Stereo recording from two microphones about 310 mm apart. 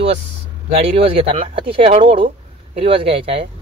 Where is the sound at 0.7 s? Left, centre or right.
Centre.